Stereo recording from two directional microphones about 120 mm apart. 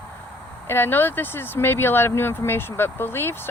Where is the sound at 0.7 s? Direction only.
20° left (ahead or behind).